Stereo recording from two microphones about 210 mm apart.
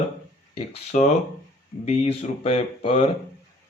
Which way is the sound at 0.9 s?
40° left (ahead or behind).